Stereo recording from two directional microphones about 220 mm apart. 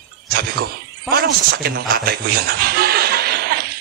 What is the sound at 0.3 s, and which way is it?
A man's voice, 45° right (ahead or behind).